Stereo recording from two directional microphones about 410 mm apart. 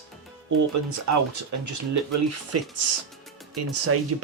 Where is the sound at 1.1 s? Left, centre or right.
Right.